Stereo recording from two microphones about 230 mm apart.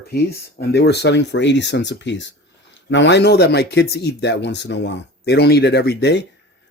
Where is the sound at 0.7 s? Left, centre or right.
Left.